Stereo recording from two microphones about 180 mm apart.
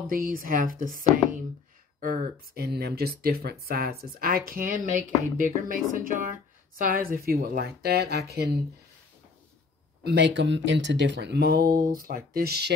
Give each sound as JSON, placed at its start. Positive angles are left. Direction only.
{"t": 0.1, "sound": "speech", "side_deg": -50}
{"t": 10.0, "sound": "speech", "side_deg": -80}